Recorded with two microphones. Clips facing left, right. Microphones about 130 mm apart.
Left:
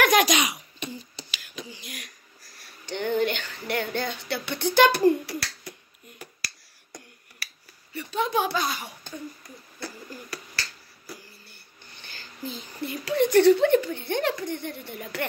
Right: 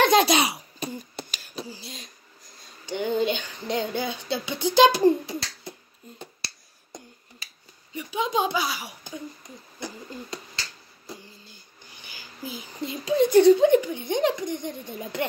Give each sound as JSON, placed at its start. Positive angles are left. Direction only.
{"t": 0.0, "sound": "a sound", "side_deg": -30}
{"t": 0.9, "sound": "beatboxing", "side_deg": -50}
{"t": 1.4, "sound": "a sound", "side_deg": -35}
{"t": 2.8, "sound": "speech", "side_deg": -10}
{"t": 5.0, "sound": "finger snapping", "side_deg": -20}
{"t": 7.9, "sound": "speech", "side_deg": -15}
{"t": 8.5, "sound": "speech", "side_deg": -5}
{"t": 9.8, "sound": "finger snapping", "side_deg": -20}
{"t": 11.1, "sound": "a sound", "side_deg": -20}
{"t": 12.8, "sound": "speech", "side_deg": -20}